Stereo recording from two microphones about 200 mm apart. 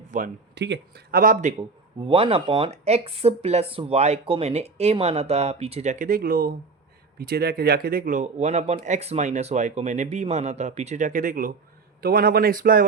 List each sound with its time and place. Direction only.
0.1 s speech: 40° right (ahead or behind)
0.5 s speech: 60° right (ahead or behind); by 1.5 s 40° right (ahead or behind)
2.0 s speech: 25° right (ahead or behind); by 12.8 s 45° right (ahead or behind)